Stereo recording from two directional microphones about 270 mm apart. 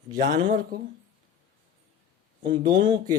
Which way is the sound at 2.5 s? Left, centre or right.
Centre.